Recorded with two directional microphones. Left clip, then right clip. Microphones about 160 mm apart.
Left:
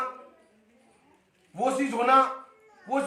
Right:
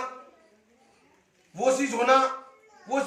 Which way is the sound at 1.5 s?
20° left (ahead or behind).